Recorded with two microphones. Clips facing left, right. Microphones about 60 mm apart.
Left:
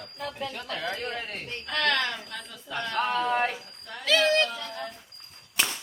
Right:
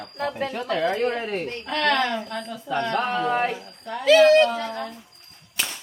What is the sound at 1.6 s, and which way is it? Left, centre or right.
Speech, centre.